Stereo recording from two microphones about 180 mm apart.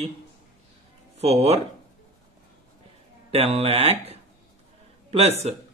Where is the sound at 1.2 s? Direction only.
35° right (ahead or behind).